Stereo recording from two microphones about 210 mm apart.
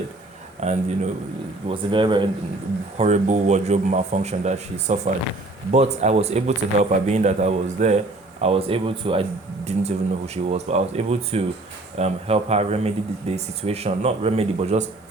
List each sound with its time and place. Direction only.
0.6 s speech: 35° right (ahead or behind)
3.0 s speech: 35° right (ahead or behind)